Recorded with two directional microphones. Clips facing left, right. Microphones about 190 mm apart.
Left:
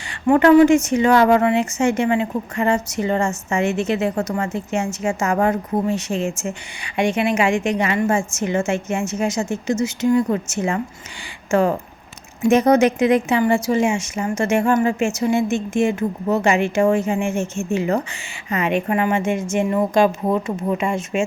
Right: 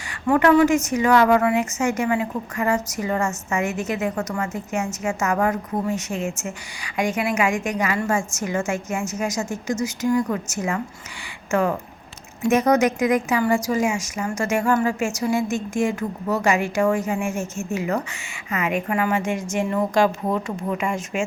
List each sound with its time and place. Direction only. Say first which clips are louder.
0.3 s a woman's voice: left 5 dB; 25° left (ahead or behind)